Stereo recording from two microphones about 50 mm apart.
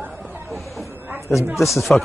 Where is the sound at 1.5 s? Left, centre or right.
Centre.